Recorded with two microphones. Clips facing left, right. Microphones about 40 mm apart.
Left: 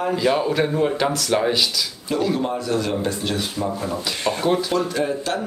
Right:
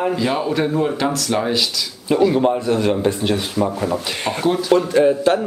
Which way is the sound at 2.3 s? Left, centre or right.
Right.